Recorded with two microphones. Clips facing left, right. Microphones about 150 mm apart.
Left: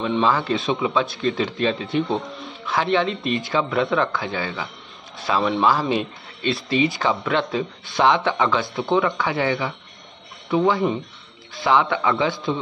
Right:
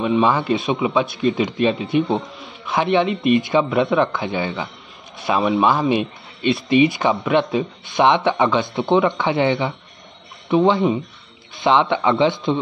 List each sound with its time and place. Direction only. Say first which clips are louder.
0.2 s speech: right 3 dB; 20° right (ahead or behind)